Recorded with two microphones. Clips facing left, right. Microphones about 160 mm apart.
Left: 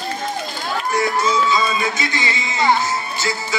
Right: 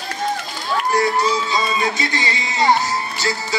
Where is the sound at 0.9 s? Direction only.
35° right (ahead or behind).